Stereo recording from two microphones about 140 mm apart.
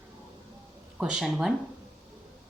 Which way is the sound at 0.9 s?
5° right (ahead or behind).